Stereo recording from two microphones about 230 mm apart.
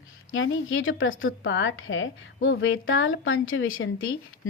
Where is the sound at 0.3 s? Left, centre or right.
Left.